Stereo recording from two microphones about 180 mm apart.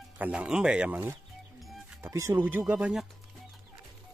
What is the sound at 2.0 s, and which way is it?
Speech, 15° right (ahead or behind).